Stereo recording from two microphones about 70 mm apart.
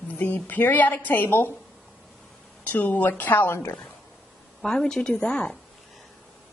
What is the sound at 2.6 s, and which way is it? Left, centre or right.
A woman's voice, left.